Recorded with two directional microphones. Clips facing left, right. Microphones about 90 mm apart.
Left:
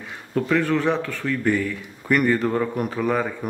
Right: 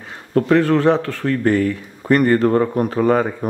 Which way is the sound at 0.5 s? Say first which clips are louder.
Right 6 dB; 40° right (ahead or behind).